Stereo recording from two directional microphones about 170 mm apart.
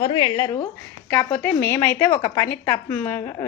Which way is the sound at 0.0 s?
30° left (ahead or behind).